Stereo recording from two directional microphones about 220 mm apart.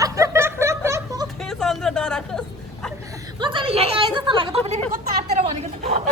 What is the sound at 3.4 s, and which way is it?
A woman's voice, 20° right (ahead or behind).